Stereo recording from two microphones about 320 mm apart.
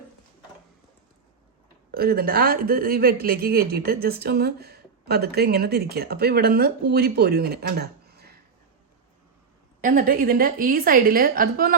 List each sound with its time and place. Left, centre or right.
1.9 s speech: right
9.8 s speech: right